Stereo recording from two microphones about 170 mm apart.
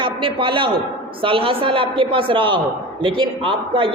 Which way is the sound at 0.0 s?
30° right (ahead or behind).